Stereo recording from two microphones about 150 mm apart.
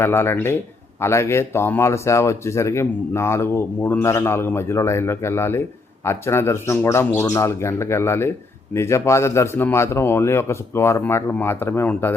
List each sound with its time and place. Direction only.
0.0 s a man's voice: 15° left (ahead or behind)